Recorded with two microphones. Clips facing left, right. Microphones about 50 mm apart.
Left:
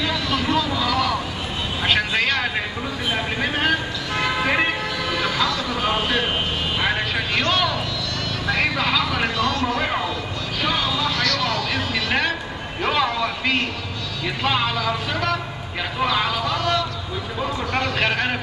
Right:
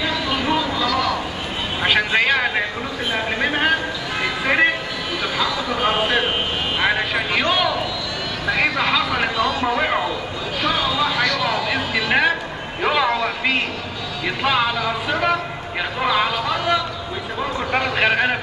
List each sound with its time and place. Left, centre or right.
0.3 s vehicle: centre
0.7 s a sound: centre
1.8 s vehicle: centre
3.3 s speech: centre
4.2 s vehicle: centre
5.2 s music: centre
6.8 s vehicle: centre
8.5 s a sound: centre
10.8 s music: centre
12.8 s vehicle: centre
14.2 s speech: centre